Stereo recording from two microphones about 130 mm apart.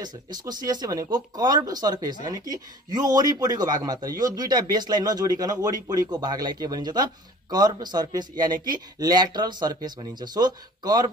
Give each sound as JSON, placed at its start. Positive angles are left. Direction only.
{"t": 0.0, "sound": "speech", "side_deg": -30}